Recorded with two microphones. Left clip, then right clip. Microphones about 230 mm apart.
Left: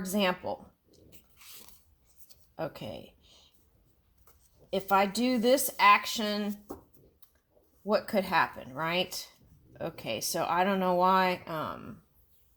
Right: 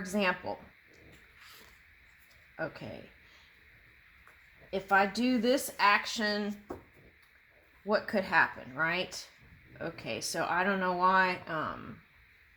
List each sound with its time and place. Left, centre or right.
0.0 s speech: left
2.6 s speech: left
4.7 s speech: left
7.9 s speech: left